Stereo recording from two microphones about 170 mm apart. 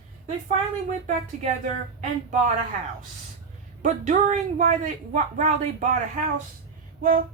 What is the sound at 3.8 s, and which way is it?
Speech, 45° right (ahead or behind).